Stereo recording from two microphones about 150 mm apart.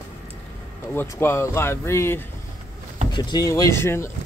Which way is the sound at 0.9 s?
20° left (ahead or behind).